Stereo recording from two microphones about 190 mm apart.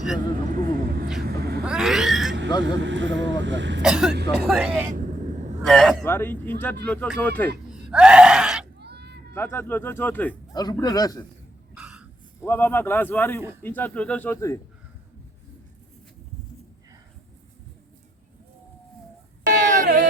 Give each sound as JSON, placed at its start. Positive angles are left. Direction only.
{"t": 0.4, "sound": "vehicle", "side_deg": -45}
{"t": 1.2, "sound": "vehicle", "side_deg": -55}
{"t": 1.6, "sound": "a sound", "side_deg": -5}
{"t": 2.8, "sound": "speech", "side_deg": -75}
{"t": 3.8, "sound": "speech", "side_deg": -5}
{"t": 4.9, "sound": "vehicle", "side_deg": -40}
{"t": 5.6, "sound": "speech", "side_deg": 0}
{"t": 7.7, "sound": "groan", "side_deg": -5}
{"t": 8.8, "sound": "a sound", "side_deg": -60}
{"t": 9.3, "sound": "speech", "side_deg": 10}
{"t": 10.5, "sound": "a man's voice", "side_deg": 20}
{"t": 11.7, "sound": "a sound", "side_deg": -5}
{"t": 12.4, "sound": "speech", "side_deg": 10}
{"t": 19.5, "sound": "a sound", "side_deg": -40}